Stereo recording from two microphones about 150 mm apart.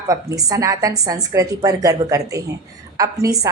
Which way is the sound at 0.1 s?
25° right (ahead or behind).